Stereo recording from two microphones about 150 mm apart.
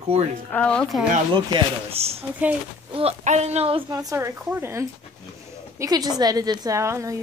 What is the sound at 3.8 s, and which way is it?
A woman's voice, 25° right (ahead or behind).